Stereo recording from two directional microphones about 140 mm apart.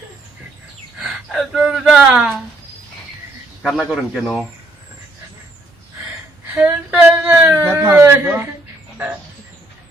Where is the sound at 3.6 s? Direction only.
Centre (ahead or behind).